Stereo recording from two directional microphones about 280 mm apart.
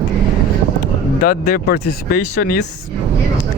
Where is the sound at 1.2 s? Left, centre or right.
Left.